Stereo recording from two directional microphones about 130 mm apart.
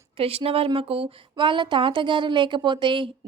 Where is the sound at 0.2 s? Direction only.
50° right (ahead or behind).